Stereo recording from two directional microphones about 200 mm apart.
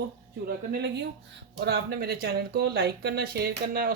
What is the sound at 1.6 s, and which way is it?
Speech, 50° right (ahead or behind).